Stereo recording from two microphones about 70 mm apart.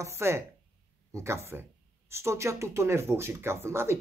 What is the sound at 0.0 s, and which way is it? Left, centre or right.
Speech, right.